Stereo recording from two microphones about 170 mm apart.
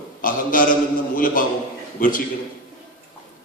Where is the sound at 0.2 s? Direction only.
55° left (ahead or behind).